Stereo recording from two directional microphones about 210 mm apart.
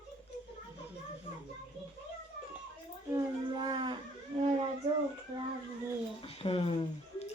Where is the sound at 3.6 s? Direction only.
20° right (ahead or behind).